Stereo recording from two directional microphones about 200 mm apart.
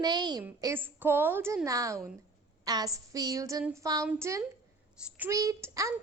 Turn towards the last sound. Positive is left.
turn(degrees=-15)  # may be behind; listen again after turning